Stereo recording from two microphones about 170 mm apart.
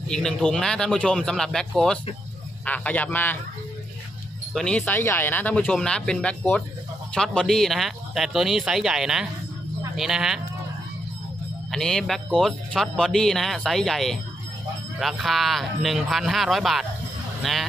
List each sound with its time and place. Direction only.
0.1 s speech: 5° left (ahead or behind)
4.6 s speech: 5° left (ahead or behind)
11.7 s speech: 5° left (ahead or behind)